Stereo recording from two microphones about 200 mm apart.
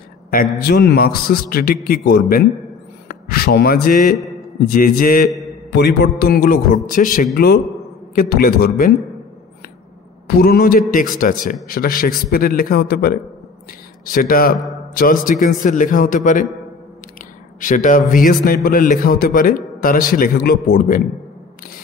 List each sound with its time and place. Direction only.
0.3 s a man's voice: 45° left (ahead or behind)
10.2 s a man's voice: 50° left (ahead or behind)
17.6 s a man's voice: 40° left (ahead or behind)